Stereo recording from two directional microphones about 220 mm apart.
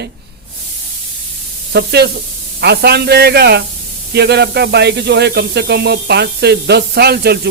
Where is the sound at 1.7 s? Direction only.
50° right (ahead or behind).